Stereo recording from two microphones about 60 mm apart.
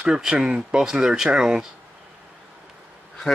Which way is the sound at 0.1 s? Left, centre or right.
Centre.